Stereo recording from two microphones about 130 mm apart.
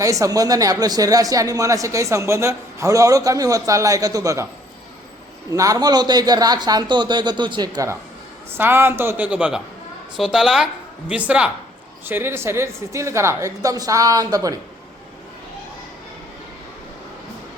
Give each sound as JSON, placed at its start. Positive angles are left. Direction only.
{"t": 0.0, "sound": "speech", "side_deg": -25}
{"t": 5.5, "sound": "a man's voice", "side_deg": -25}
{"t": 8.5, "sound": "a woman's voice", "side_deg": -15}